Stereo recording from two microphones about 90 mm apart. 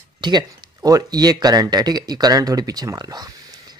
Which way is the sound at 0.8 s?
40° right (ahead or behind).